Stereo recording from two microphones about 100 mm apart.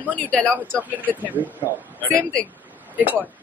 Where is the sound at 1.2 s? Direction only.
15° right (ahead or behind).